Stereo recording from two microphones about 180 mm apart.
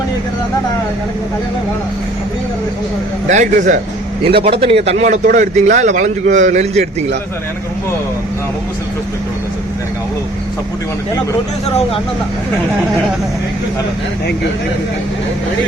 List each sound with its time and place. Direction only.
3.2 s a man's voice: 45° right (ahead or behind)
4.3 s a man's voice: 30° right (ahead or behind)